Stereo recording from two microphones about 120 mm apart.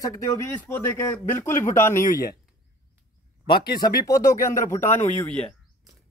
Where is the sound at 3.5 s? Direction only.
35° left (ahead or behind); by 5.0 s 20° left (ahead or behind).